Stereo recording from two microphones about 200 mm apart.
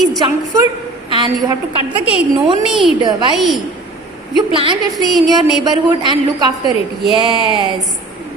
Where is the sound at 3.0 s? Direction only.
20° right (ahead or behind).